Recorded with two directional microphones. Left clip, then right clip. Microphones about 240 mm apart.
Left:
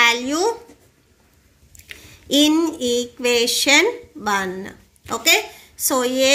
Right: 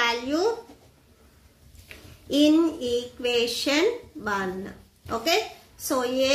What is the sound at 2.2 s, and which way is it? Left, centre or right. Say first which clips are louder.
A woman's voice: left 4 dB; left.